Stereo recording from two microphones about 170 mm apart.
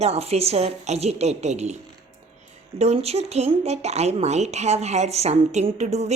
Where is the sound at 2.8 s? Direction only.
40° right (ahead or behind).